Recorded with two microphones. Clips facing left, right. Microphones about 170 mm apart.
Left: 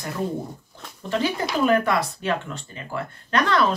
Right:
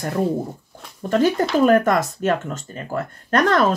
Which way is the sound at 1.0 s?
45° right (ahead or behind).